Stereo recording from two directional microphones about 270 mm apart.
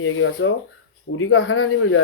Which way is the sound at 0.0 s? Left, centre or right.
Left.